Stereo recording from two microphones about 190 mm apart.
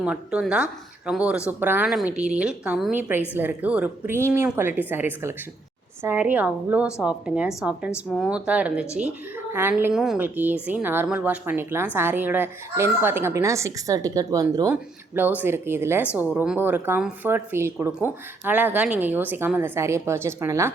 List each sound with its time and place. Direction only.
0.0 s speech: 5° right (ahead or behind)